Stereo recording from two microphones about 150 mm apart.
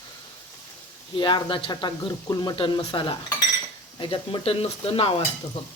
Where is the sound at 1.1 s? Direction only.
35° left (ahead or behind).